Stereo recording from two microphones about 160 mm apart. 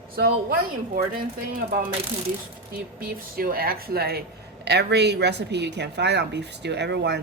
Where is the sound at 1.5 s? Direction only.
65° right (ahead or behind).